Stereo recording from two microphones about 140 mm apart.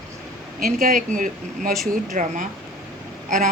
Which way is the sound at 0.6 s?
90° right.